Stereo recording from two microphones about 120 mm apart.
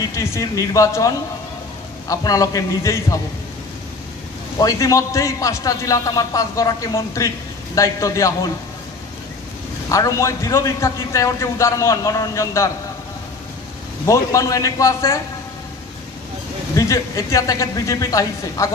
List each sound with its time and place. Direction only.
0.0 s a man's voice: 25° left (ahead or behind)
4.6 s a man's voice: 30° left (ahead or behind)
9.8 s a man's voice: 25° left (ahead or behind)
14.0 s a man's voice: 25° left (ahead or behind)
16.7 s a man's voice: 25° left (ahead or behind)